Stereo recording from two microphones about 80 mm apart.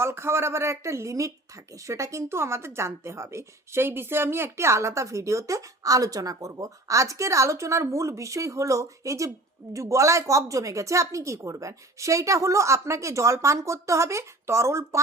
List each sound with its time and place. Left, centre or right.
0.0 s a woman's voice: right